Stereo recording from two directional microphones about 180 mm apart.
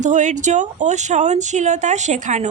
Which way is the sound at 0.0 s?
45° right (ahead or behind).